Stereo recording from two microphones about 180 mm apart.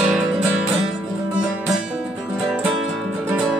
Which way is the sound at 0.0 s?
5° right (ahead or behind).